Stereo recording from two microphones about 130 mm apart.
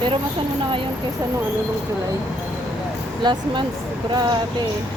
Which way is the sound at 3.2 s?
35° right (ahead or behind).